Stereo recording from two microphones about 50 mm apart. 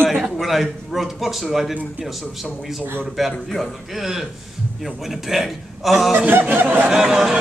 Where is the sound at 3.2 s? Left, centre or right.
Centre.